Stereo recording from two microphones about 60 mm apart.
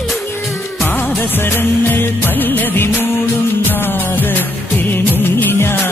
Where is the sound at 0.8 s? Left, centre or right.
Left.